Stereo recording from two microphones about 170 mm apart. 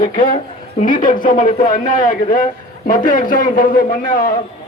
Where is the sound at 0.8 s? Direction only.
50° left (ahead or behind).